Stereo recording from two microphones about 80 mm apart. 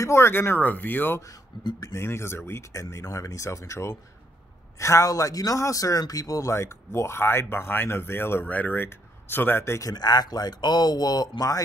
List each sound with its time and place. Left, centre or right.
0.0 s a man's voice: left
2.8 s a man's voice: left
9.8 s speech: left